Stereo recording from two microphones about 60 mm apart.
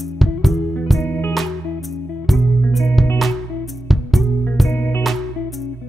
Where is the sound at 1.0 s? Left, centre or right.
Left.